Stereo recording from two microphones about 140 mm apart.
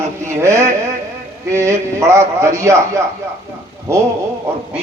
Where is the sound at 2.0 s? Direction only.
20° right (ahead or behind).